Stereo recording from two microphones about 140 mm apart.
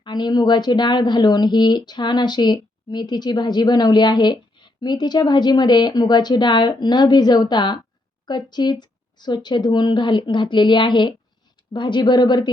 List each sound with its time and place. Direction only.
0.0 s speech: 30° left (ahead or behind)